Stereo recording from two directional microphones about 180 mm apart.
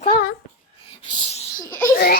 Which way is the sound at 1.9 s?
55° left (ahead or behind).